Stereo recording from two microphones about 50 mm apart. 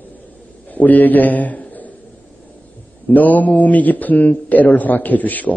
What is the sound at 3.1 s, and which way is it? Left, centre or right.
A man's voice, left.